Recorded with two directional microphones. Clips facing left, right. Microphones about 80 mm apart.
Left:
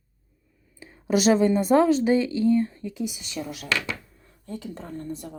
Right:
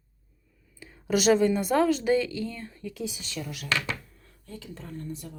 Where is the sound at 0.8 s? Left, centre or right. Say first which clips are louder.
Left 3 dB; left; by 3.4 s centre.